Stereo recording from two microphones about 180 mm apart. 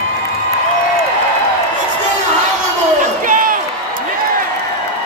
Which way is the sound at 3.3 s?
50° right (ahead or behind).